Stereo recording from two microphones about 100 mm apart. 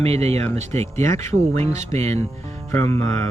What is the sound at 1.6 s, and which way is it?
Speech, 90° right.